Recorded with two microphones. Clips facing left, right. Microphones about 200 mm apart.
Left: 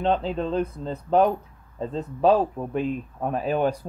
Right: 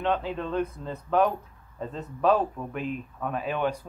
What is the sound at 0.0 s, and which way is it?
Speech, 30° left (ahead or behind).